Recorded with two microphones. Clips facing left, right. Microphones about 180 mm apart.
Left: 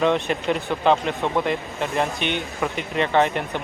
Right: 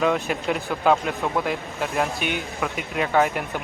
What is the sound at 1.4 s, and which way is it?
Speech, centre (ahead or behind).